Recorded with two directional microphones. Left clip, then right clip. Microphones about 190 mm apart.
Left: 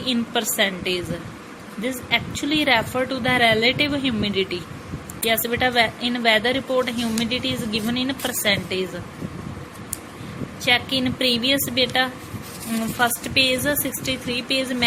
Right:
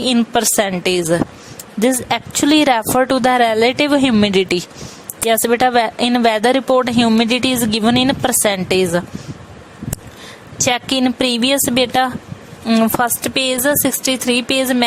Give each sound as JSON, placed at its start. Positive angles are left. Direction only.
{"t": 0.0, "sound": "speech", "side_deg": -50}
{"t": 10.7, "sound": "speech", "side_deg": -50}